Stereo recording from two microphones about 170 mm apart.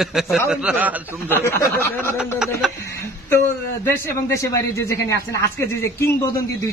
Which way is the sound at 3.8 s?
15° left (ahead or behind).